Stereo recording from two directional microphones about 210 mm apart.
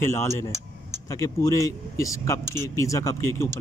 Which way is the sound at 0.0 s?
10° left (ahead or behind).